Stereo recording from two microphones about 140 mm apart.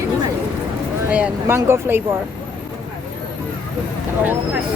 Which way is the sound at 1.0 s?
10° right (ahead or behind).